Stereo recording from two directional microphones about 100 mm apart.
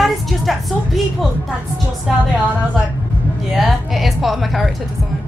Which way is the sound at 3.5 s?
Centre (ahead or behind).